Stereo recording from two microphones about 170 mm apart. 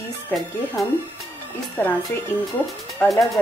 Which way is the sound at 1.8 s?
10° left (ahead or behind).